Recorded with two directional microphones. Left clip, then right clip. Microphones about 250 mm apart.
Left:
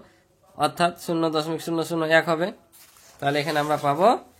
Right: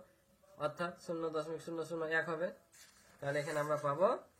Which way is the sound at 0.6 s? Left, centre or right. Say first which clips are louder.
Left 17 dB; left.